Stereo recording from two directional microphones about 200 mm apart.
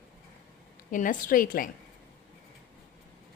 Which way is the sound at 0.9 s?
40° left (ahead or behind).